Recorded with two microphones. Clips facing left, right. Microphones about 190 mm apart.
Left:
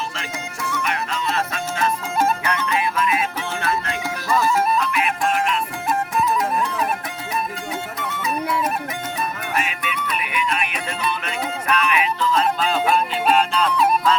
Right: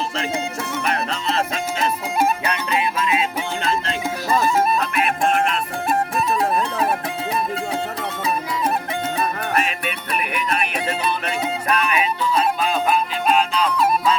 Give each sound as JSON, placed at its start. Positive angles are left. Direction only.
{"t": 0.7, "sound": "music", "side_deg": -35}
{"t": 1.8, "sound": "music", "side_deg": -15}
{"t": 7.9, "sound": "music", "side_deg": -35}
{"t": 10.2, "sound": "music", "side_deg": -50}
{"t": 11.7, "sound": "music", "side_deg": -30}
{"t": 12.3, "sound": "music", "side_deg": -10}